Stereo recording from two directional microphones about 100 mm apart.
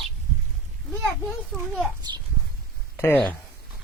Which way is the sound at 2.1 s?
40° right (ahead or behind).